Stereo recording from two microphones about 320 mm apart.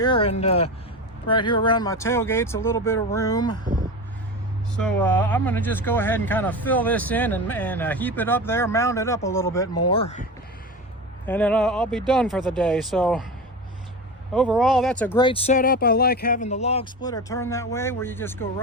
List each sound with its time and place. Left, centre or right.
0.0 s speech: centre
4.8 s speech: centre
11.3 s speech: centre
14.3 s speech: centre